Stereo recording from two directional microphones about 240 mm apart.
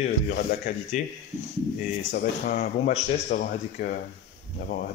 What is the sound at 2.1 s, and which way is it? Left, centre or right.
A man's voice, left.